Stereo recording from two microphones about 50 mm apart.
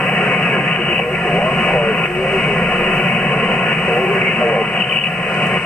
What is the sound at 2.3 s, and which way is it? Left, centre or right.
Radio, centre.